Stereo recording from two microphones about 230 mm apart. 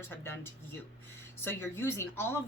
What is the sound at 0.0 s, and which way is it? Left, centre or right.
Speech, centre.